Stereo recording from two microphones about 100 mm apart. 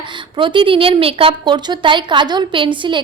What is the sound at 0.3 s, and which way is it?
Speech, 55° right (ahead or behind).